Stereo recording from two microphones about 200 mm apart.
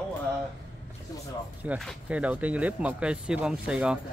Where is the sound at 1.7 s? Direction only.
5° right (ahead or behind).